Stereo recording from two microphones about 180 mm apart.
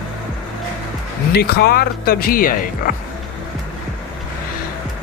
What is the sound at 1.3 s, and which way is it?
Speech, 60° left (ahead or behind).